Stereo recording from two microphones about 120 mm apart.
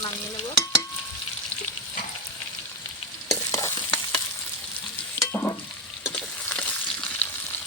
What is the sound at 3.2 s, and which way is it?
Stir, 25° left (ahead or behind).